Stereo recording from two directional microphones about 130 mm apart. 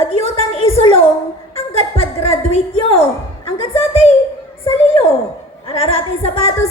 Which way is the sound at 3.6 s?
50° left (ahead or behind).